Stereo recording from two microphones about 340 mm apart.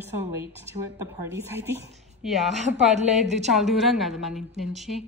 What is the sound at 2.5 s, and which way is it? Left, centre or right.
Speech, centre.